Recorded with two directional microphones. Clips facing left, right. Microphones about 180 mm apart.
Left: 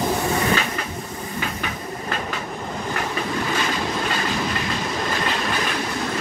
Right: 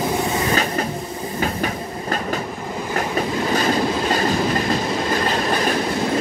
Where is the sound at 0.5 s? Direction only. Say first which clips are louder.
Right 3 dB; 40° right (ahead or behind).